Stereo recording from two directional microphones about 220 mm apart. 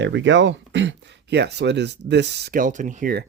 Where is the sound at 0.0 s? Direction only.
55° right (ahead or behind).